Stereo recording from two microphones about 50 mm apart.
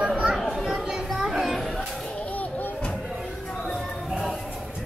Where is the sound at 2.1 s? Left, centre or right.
Left.